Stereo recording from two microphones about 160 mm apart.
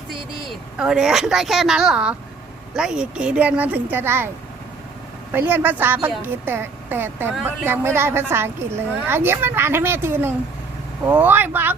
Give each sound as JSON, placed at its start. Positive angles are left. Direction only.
{"t": 0.8, "sound": "a woman's voice", "side_deg": -5}
{"t": 5.3, "sound": "a woman's voice", "side_deg": -10}